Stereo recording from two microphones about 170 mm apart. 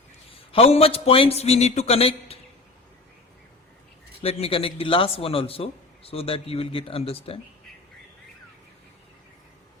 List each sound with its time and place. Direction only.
0.5 s a man's voice: 35° left (ahead or behind)
4.2 s a man's voice: 35° left (ahead or behind)